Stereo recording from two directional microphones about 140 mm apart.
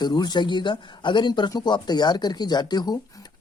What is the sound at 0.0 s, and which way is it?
Speech, 30° left (ahead or behind).